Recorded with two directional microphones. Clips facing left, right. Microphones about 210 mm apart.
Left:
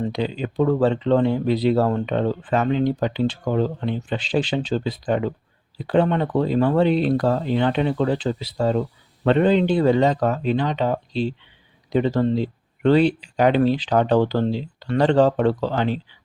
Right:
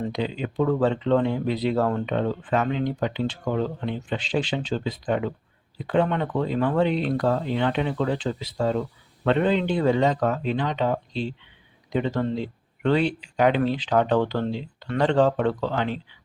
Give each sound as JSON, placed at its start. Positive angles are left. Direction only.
{"t": 0.1, "sound": "speech", "side_deg": 35}